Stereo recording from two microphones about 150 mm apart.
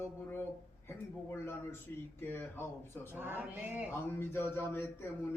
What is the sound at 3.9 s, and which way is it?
Speech, 15° left (ahead or behind).